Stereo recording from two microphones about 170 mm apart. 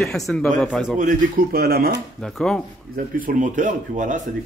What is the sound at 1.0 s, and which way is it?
Speech, 55° right (ahead or behind).